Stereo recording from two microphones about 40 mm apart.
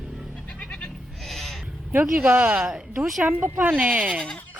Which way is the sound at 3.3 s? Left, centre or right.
Right.